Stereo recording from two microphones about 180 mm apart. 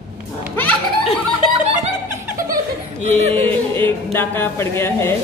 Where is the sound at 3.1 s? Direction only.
35° right (ahead or behind).